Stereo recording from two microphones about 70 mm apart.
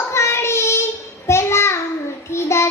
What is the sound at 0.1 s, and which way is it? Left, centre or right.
Child singing, left.